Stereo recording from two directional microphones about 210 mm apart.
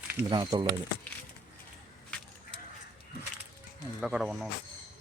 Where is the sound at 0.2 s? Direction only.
15° right (ahead or behind).